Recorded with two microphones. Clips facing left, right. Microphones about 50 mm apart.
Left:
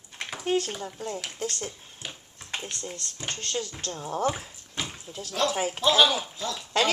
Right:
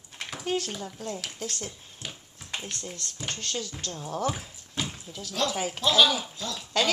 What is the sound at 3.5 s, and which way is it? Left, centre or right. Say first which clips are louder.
Speech: left 2 dB; left.